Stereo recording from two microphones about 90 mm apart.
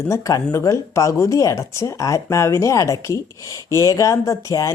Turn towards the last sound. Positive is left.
turn(degrees=35)  # may be behind; listen again after turning